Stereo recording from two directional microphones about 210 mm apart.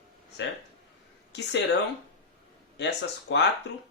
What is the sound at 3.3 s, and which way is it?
Speech, 60° left (ahead or behind).